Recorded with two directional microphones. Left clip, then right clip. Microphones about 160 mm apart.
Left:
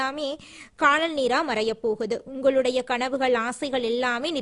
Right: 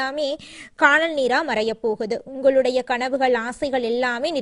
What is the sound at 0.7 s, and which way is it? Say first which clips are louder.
A woman's voice: right 4 dB; 20° right (ahead or behind).